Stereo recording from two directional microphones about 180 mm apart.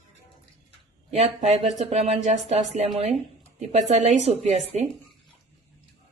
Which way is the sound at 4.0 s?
35° right (ahead or behind).